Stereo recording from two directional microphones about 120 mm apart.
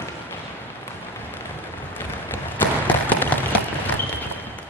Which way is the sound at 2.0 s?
15° left (ahead or behind).